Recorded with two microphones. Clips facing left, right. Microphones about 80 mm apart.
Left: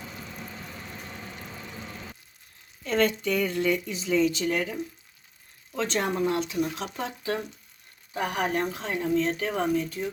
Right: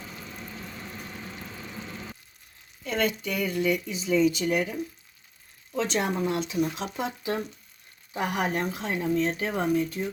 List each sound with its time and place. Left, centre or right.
2.8 s speech: centre
5.9 s speech: centre